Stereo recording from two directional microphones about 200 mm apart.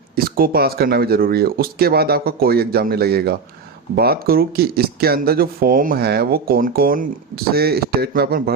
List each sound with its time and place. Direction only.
0.2 s speech: 45° right (ahead or behind)